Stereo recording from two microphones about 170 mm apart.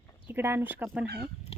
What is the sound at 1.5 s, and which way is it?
Pig, 35° left (ahead or behind).